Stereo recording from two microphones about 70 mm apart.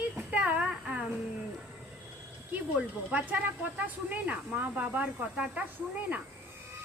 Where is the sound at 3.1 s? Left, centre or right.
Right.